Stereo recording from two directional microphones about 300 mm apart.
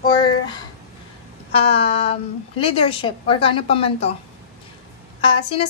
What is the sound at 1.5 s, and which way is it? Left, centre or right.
A woman's voice, centre.